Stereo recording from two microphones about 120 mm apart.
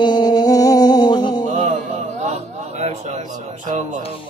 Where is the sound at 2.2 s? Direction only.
70° right (ahead or behind).